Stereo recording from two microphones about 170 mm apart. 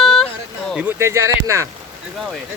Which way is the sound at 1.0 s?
15° right (ahead or behind).